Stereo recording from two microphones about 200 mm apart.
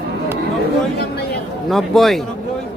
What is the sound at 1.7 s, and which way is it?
Speech, centre (ahead or behind).